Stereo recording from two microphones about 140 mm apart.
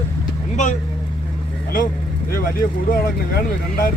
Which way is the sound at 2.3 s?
85° left.